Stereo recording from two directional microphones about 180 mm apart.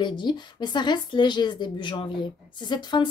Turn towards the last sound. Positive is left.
turn(degrees=25)  # may be behind; listen again after turning